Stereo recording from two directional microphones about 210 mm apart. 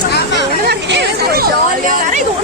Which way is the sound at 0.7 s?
50° right (ahead or behind).